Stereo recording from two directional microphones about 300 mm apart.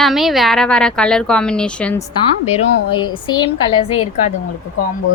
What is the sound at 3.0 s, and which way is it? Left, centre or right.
A woman's voice, centre.